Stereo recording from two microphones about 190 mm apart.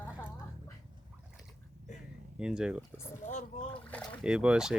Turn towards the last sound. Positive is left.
turn(degrees=-5)  # may be behind; listen again after turning